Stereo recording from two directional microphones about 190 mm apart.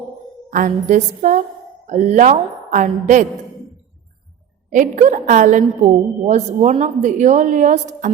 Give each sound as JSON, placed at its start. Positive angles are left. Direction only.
{"t": 0.5, "sound": "a woman's voice", "side_deg": -40}
{"t": 4.7, "sound": "a woman's voice", "side_deg": -40}